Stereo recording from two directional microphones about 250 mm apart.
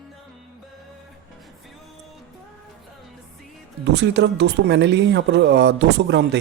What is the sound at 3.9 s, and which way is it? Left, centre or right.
Speech, right.